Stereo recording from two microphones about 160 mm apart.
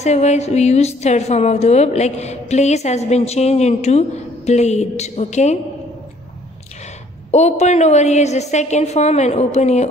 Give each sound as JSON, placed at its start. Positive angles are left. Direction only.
{"t": 0.0, "sound": "a woman's voice", "side_deg": 45}
{"t": 7.2, "sound": "a woman's voice", "side_deg": 45}